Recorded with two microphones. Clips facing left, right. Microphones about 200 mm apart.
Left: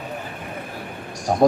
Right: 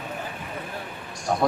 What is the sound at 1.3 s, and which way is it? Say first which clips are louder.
Speech: left 5 dB; 35° left (ahead or behind).